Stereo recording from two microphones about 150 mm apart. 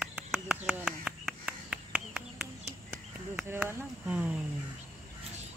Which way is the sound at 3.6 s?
10° right (ahead or behind).